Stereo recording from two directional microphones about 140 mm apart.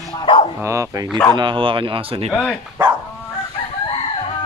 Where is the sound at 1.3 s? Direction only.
35° right (ahead or behind).